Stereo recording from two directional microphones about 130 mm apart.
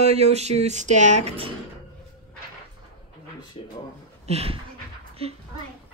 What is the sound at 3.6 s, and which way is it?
Speech, 40° left (ahead or behind).